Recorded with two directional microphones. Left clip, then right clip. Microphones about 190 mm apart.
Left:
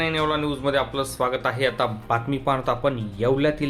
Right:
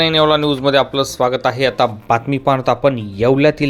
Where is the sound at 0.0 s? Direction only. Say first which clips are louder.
Right 10 dB; 45° right (ahead or behind).